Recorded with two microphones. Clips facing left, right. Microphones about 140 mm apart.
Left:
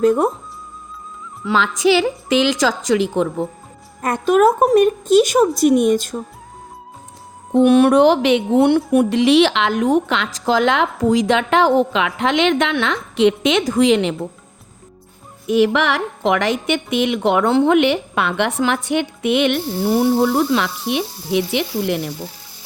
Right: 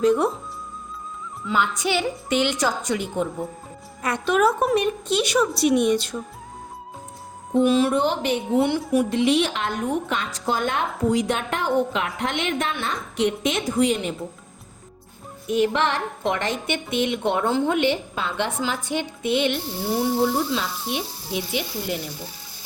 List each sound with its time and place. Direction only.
0.0 s a woman's voice: 45° left (ahead or behind)
1.5 s a woman's voice: 90° left
4.0 s a woman's voice: 45° left (ahead or behind)
7.5 s a woman's voice: 65° left (ahead or behind); by 14.2 s 85° left
15.4 s a woman's voice: 90° left; by 22.1 s 70° left (ahead or behind)